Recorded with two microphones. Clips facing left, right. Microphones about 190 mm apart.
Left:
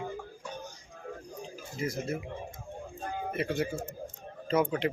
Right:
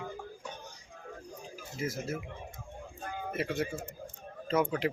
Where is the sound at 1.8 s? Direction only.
5° right (ahead or behind).